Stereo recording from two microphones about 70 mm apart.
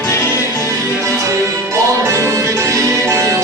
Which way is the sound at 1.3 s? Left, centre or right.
Right.